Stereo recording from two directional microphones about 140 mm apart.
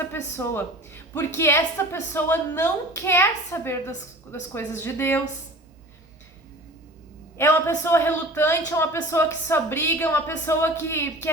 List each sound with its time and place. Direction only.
0.0 s a woman's voice: 15° left (ahead or behind)
7.3 s a woman's voice: 15° left (ahead or behind)